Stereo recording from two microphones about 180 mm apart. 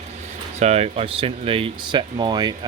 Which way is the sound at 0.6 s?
35° right (ahead or behind).